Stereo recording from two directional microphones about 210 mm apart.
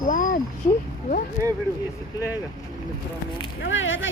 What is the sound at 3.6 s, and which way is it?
Speech, 65° left (ahead or behind).